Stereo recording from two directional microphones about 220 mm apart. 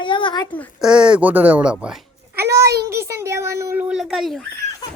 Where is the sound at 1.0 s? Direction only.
5° right (ahead or behind).